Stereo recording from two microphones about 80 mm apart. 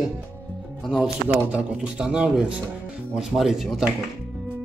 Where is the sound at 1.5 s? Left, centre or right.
Centre.